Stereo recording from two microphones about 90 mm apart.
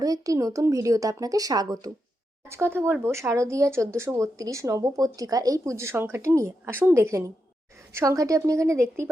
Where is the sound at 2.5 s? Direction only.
30° right (ahead or behind).